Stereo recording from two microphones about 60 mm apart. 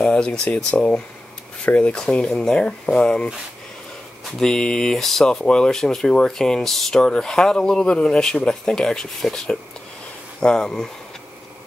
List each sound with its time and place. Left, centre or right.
0.0 s speech: centre
4.4 s speech: centre